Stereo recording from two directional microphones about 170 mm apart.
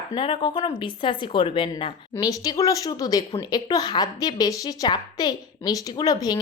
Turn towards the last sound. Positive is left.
turn(degrees=20)  # may be behind; listen again after turning